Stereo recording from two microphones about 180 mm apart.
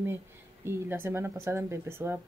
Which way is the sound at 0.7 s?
10° right (ahead or behind).